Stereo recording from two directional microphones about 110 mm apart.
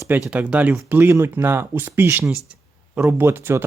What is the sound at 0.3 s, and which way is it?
Speech, 15° right (ahead or behind).